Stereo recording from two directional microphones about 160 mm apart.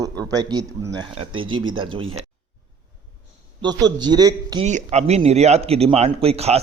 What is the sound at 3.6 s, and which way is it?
A man's voice, 25° right (ahead or behind).